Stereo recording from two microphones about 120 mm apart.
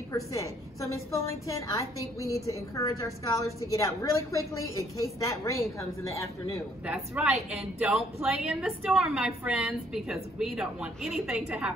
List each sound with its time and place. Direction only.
0.1 s a woman's voice: 25° left (ahead or behind)
6.9 s a woman's voice: 10° right (ahead or behind)